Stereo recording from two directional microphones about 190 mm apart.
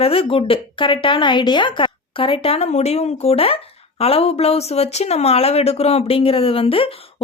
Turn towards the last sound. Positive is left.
turn(degrees=30)  # may be behind; listen again after turning